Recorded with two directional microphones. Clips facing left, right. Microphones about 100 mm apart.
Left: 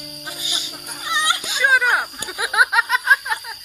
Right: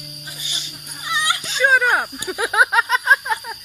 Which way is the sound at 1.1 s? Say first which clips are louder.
Left 1 dB; 25° left (ahead or behind).